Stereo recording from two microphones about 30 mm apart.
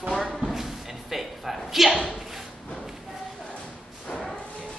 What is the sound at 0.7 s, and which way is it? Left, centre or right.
Music, centre.